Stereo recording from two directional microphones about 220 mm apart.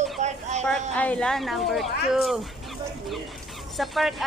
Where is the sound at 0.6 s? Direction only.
5° left (ahead or behind).